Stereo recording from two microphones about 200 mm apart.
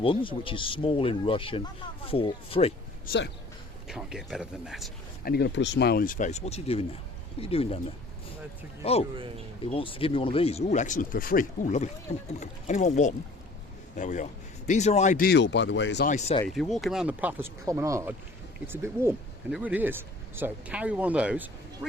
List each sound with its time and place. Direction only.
0.0 s speech: 25° left (ahead or behind)
3.1 s speech: 55° left (ahead or behind)
3.8 s speech: 5° right (ahead or behind)
5.2 s speech: 55° left (ahead or behind); by 7.8 s 30° left (ahead or behind)
8.8 s speech: 30° left (ahead or behind)
15.3 s speech: 60° left (ahead or behind)
16.0 s speech: 35° left (ahead or behind)
16.5 s speech: centre (ahead or behind)